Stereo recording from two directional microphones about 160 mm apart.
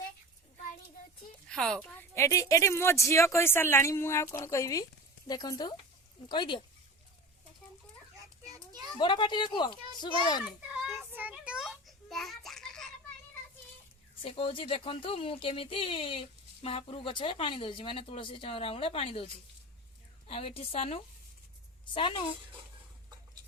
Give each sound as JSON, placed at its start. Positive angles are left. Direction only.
{"t": 1.5, "sound": "a woman's voice", "side_deg": 5}
{"t": 8.5, "sound": "children playing", "side_deg": -25}
{"t": 9.0, "sound": "speech", "side_deg": 30}
{"t": 10.4, "sound": "children playing", "side_deg": 0}
{"t": 10.9, "sound": "a sound", "side_deg": -10}
{"t": 14.2, "sound": "speech", "side_deg": 35}